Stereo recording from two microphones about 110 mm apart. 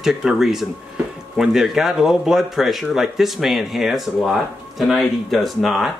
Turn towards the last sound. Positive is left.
turn(degrees=0)  # may be behind; listen again after turning